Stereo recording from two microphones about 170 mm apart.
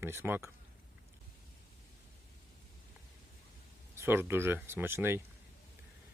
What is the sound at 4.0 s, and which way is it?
Speech, 15° right (ahead or behind).